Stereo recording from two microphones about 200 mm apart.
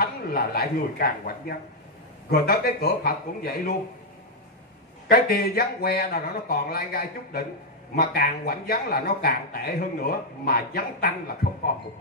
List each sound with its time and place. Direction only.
0.0 s speech: 50° left (ahead or behind)
5.1 s speech: 50° left (ahead or behind)